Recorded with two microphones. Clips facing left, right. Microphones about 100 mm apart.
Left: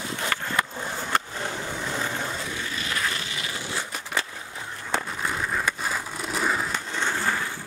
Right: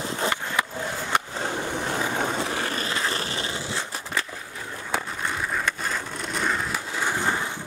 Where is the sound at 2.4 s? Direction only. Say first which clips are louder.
Right 5 dB; 65° right (ahead or behind).